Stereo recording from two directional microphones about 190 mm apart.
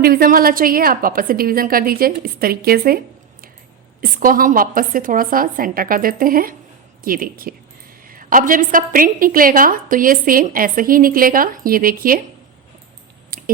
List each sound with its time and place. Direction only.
0.0 s a woman's voice: 50° right (ahead or behind)
4.2 s a woman's voice: 45° right (ahead or behind)
13.3 s a sound: 50° right (ahead or behind)